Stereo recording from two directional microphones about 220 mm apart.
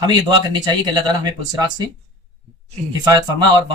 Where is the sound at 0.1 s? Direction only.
20° right (ahead or behind).